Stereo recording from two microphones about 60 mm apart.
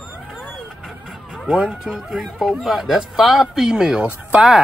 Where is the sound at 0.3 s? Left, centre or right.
Centre.